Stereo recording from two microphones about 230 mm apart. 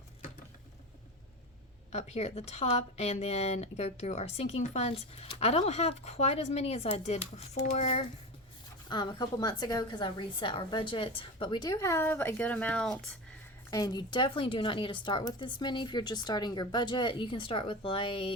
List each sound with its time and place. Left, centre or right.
1.9 s speech: left
8.9 s speech: centre
13.7 s speech: centre